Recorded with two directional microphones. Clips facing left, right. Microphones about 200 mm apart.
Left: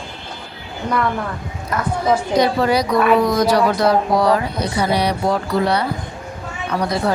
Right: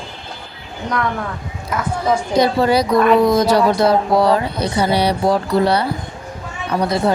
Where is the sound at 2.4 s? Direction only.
30° right (ahead or behind).